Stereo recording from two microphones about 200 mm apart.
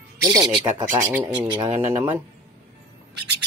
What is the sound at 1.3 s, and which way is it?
Rub, 20° right (ahead or behind).